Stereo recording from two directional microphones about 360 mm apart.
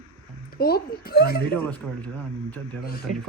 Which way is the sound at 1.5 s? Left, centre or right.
Centre.